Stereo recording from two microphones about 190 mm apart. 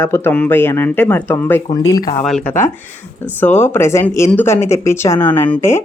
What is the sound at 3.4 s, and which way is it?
Speech, 10° left (ahead or behind).